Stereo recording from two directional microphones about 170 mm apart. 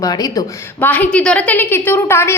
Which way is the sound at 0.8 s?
10° left (ahead or behind).